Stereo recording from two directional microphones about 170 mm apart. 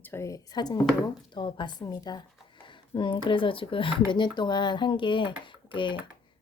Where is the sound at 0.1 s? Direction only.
20° left (ahead or behind).